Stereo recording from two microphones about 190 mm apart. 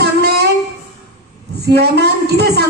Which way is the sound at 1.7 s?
60° right (ahead or behind).